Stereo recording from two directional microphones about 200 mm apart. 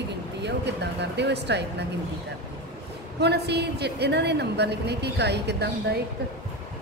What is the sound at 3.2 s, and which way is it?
A woman's voice, 55° right (ahead or behind).